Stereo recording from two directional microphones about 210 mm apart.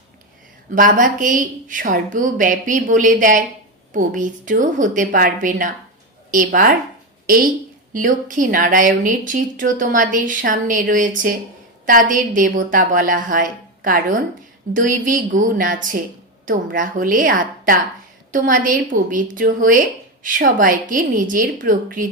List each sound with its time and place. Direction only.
0.8 s a woman's voice: 40° right (ahead or behind)